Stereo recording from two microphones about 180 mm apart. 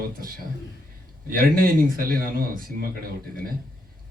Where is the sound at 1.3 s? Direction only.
55° right (ahead or behind).